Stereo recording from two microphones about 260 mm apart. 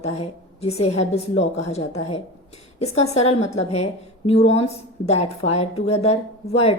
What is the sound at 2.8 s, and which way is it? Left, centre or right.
A woman's voice, left.